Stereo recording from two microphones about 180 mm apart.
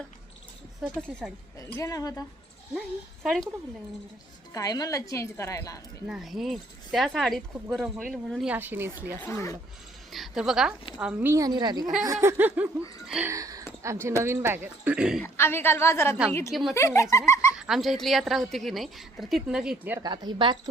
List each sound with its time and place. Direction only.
1.5 s speech: 20° left (ahead or behind)
3.2 s a woman's voice: centre (ahead or behind)
4.5 s speech: 20° left (ahead or behind)
6.1 s a woman's voice: centre (ahead or behind)
9.2 s a woman's voice: 15° left (ahead or behind)
10.1 s a woman's voice: centre (ahead or behind)
13.3 s speech: 20° right (ahead or behind)
15.2 s a woman's voice: 10° left (ahead or behind)
16.5 s a woman's voice: centre (ahead or behind)
16.7 s a woman's voice: 15° left (ahead or behind)
17.6 s a woman's voice: centre (ahead or behind)
20.0 s a woman's voice: 25° right (ahead or behind)